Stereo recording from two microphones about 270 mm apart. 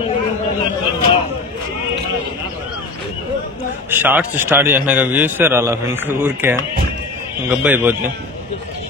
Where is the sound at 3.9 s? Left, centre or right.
Centre.